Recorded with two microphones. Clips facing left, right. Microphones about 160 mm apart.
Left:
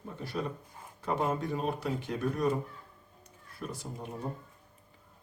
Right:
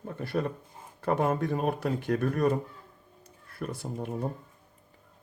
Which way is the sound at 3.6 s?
55° right (ahead or behind).